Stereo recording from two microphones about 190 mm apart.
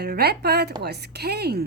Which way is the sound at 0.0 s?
55° right (ahead or behind).